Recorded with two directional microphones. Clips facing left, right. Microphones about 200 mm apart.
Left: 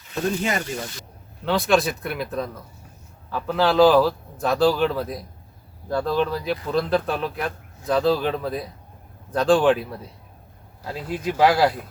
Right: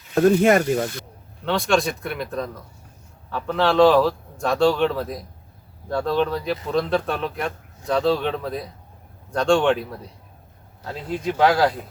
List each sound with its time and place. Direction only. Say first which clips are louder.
0.1 s speech: right 9 dB; 55° right (ahead or behind)
1.5 s a man's voice: left 1 dB; centre (ahead or behind)